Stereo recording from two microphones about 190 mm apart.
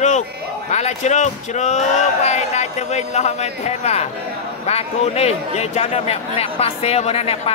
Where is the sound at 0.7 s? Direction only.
35° left (ahead or behind).